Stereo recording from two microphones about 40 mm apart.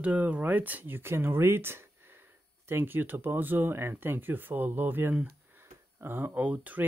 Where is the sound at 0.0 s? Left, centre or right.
Right.